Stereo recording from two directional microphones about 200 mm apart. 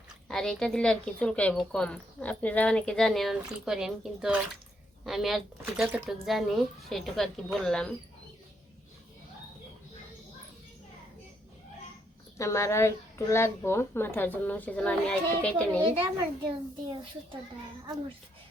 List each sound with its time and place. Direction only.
0.3 s speech: 5° left (ahead or behind)
12.4 s a woman's voice: 15° left (ahead or behind)
15.8 s a child's voice: 25° right (ahead or behind)